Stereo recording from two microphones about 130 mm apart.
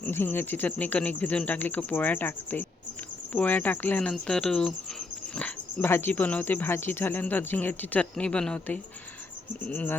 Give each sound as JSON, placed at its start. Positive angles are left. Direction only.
{"t": 0.0, "sound": "speech", "side_deg": 15}